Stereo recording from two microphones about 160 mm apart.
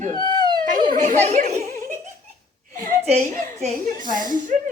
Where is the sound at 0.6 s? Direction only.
55° right (ahead or behind).